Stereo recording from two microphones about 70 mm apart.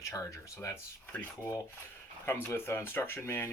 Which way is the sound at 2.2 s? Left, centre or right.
Left.